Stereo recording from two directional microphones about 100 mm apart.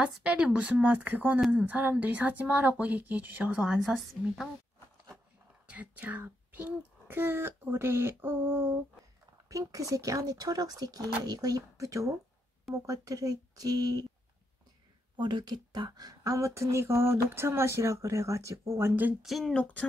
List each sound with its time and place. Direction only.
0.0 s speech: 10° right (ahead or behind)
5.7 s speech: 15° right (ahead or behind)
9.5 s speech: 35° right (ahead or behind)
15.1 s speech: 50° right (ahead or behind); by 19.1 s 20° right (ahead or behind)
19.2 s a sound: centre (ahead or behind)
19.5 s a sound: 10° left (ahead or behind)